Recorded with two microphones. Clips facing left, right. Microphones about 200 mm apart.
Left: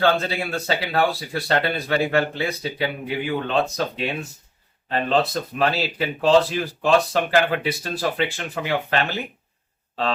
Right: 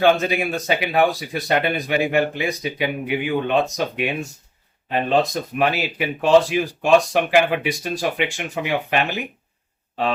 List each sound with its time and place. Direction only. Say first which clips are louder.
0.0 s speech: right 3 dB; 15° right (ahead or behind)